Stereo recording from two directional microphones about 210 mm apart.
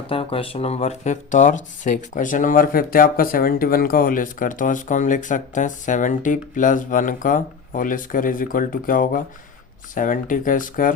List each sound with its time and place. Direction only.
0.1 s speech: 25° left (ahead or behind)